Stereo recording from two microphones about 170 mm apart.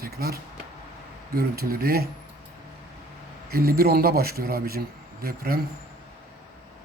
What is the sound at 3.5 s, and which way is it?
Speech, 65° right (ahead or behind).